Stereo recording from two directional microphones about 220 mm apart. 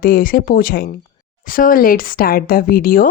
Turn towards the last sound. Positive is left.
turn(degrees=40)  # may be behind; listen again after turning